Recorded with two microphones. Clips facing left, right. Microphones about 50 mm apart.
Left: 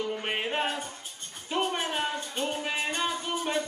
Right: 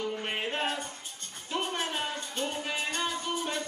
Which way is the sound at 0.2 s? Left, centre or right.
Centre.